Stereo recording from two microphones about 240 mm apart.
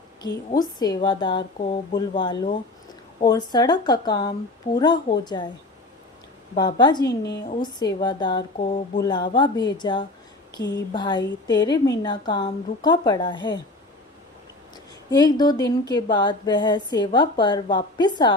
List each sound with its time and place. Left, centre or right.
0.5 s a woman's voice: centre
6.6 s a woman's voice: centre
15.1 s a woman's voice: centre